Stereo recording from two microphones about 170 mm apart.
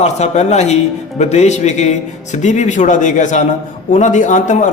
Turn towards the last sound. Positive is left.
turn(degrees=45)  # may be behind; listen again after turning